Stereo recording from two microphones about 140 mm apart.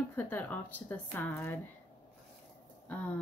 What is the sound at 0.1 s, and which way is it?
Speech, 15° left (ahead or behind).